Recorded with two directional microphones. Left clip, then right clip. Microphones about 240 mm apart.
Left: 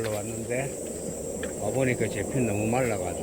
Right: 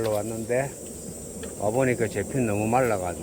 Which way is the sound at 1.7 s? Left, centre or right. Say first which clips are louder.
Right 2 dB; centre.